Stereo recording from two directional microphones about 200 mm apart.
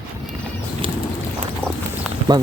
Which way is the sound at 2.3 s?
20° right (ahead or behind).